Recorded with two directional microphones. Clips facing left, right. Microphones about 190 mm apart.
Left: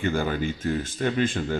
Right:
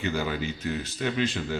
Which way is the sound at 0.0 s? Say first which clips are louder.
Left 3 dB; 50° left (ahead or behind).